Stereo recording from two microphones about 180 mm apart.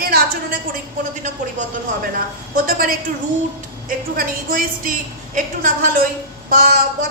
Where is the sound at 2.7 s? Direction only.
55° right (ahead or behind).